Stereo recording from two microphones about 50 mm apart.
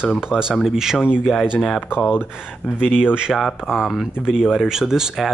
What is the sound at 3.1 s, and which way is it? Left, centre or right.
Speech, centre.